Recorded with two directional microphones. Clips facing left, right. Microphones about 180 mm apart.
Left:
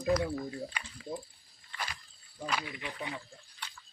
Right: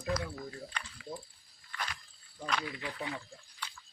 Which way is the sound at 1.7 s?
25° left (ahead or behind).